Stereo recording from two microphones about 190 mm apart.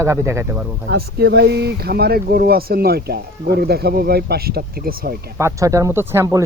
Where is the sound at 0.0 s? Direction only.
15° right (ahead or behind).